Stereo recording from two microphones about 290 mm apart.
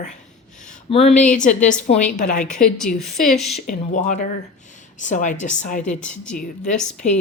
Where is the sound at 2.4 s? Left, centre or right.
Centre.